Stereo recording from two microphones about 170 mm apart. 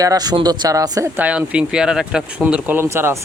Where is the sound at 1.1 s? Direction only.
10° right (ahead or behind).